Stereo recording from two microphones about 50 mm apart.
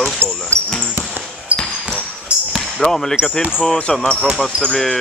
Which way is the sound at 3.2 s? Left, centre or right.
Left.